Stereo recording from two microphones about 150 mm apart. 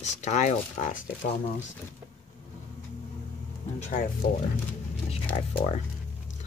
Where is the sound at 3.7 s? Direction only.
50° left (ahead or behind).